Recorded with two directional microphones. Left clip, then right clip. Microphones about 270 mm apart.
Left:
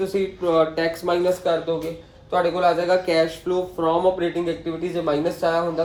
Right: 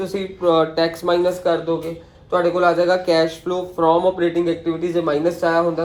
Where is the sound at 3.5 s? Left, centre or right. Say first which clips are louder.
Right 5 dB; centre.